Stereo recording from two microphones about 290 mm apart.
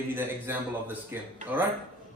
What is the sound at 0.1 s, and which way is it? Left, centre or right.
A man's voice, centre.